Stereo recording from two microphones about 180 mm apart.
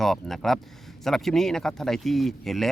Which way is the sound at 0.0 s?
Centre (ahead or behind).